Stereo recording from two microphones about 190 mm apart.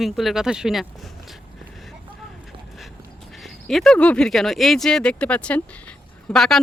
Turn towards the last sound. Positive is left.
turn(degrees=0)  # may be behind; listen again after turning